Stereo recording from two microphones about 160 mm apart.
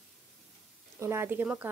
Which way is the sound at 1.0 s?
15° right (ahead or behind).